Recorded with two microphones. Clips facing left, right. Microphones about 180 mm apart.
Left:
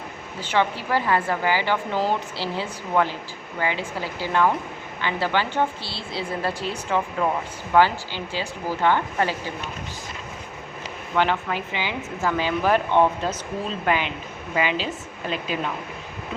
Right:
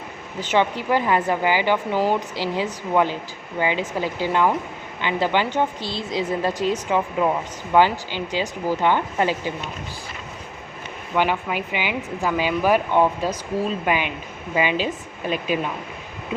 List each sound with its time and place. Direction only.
0.5 s a woman's voice: 15° right (ahead or behind)
11.2 s a woman's voice: 15° right (ahead or behind)